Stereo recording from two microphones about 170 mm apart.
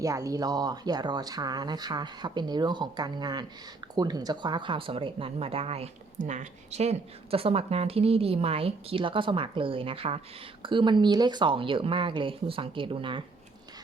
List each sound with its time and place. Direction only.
0.0 s speech: 20° right (ahead or behind)